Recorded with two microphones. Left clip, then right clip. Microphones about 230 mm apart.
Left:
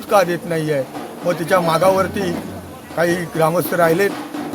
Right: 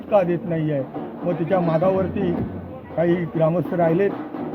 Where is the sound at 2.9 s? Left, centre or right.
Left.